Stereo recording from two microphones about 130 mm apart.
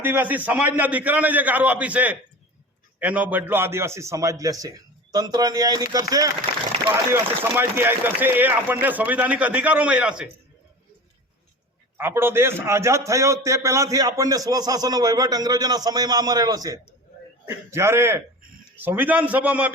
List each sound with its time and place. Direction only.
0.0 s a man's voice: 15° right (ahead or behind)
11.9 s a man's voice: 15° right (ahead or behind)